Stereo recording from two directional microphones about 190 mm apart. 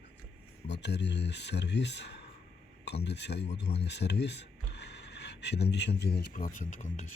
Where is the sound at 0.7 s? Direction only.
65° left (ahead or behind).